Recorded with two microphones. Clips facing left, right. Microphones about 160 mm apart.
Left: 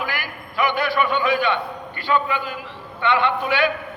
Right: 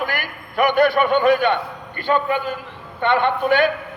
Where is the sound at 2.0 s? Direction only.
50° right (ahead or behind).